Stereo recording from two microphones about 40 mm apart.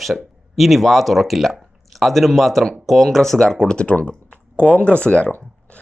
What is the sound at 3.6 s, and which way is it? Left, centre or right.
Speech, left.